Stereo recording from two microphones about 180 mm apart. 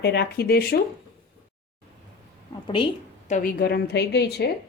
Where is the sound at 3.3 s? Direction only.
55° left (ahead or behind).